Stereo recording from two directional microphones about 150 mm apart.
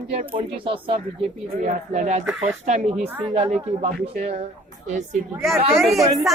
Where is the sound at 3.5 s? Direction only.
45° right (ahead or behind).